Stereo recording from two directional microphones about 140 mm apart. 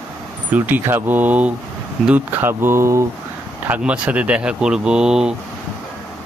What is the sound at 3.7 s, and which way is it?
Speech, 10° right (ahead or behind).